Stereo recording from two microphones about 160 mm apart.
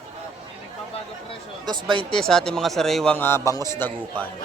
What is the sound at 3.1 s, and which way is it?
Speech, 15° left (ahead or behind).